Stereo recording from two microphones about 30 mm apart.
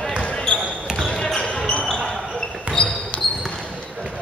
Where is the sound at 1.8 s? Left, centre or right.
Centre.